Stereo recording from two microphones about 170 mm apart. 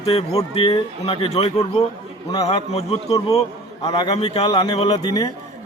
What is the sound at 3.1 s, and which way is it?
Speech, 20° left (ahead or behind).